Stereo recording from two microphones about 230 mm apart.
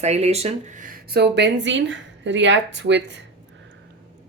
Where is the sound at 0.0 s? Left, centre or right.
Right.